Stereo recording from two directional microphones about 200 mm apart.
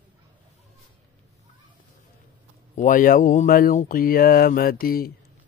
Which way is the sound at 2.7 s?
40° left (ahead or behind).